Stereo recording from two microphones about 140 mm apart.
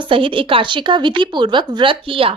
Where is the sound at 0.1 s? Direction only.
40° right (ahead or behind).